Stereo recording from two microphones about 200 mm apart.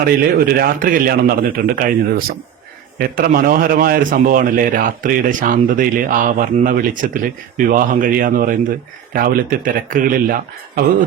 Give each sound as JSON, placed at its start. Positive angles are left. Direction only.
{"t": 0.0, "sound": "speech", "side_deg": -50}